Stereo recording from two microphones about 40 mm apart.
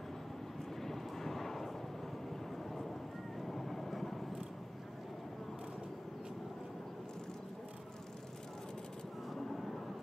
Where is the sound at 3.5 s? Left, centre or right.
Centre.